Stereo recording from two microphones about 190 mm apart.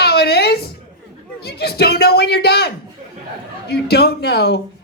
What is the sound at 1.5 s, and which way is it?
A woman's voice, 55° left (ahead or behind).